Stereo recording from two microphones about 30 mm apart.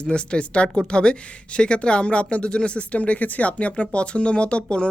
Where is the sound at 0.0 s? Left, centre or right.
Left.